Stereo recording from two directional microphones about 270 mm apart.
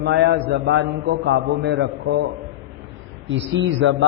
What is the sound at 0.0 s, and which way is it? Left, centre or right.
A man's voice, right.